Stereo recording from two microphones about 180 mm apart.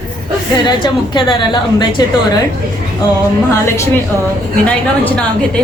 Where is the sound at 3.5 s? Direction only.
15° left (ahead or behind).